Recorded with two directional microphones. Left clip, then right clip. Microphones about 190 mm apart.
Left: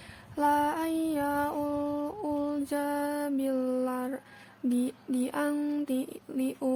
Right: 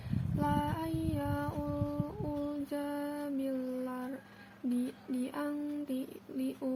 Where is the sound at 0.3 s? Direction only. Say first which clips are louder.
Left 8 dB; 30° left (ahead or behind).